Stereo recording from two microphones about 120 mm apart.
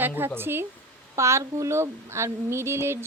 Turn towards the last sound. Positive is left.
turn(degrees=-20)  # may be behind; listen again after turning